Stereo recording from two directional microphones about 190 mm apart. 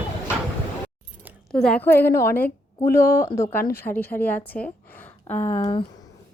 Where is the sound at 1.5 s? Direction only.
5° left (ahead or behind).